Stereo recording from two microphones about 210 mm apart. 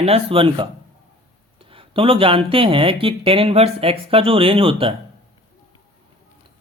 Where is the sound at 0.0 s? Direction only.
25° right (ahead or behind).